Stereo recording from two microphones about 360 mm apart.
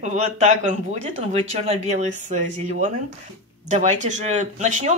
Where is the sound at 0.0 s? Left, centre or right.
Centre.